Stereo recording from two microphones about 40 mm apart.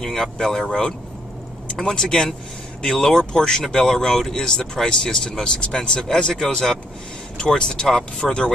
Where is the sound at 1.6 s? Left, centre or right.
Centre.